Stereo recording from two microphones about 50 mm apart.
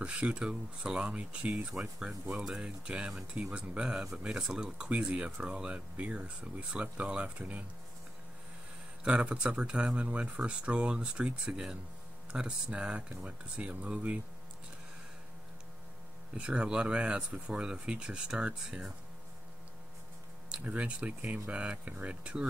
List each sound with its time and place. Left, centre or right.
0.0 s speech: right
9.0 s speech: right
16.3 s speech: right
20.6 s speech: right